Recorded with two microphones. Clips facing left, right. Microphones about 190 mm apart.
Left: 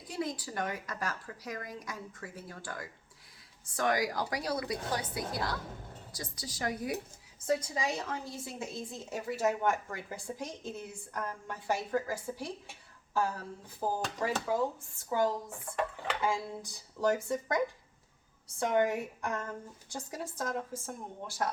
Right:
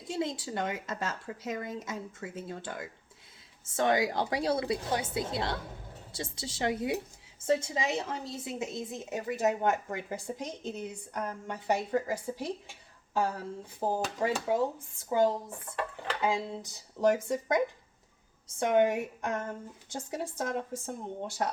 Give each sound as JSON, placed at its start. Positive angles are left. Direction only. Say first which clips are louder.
{"t": 0.0, "sound": "a woman's voice", "louder": "right 3 dB", "side_deg": -25}
{"t": 18.6, "sound": "a woman's voice", "louder": "right 3 dB", "side_deg": -20}